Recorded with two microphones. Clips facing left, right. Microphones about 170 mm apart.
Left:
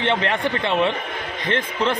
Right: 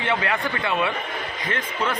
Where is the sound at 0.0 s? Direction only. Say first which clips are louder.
Left 3 dB; 30° left (ahead or behind).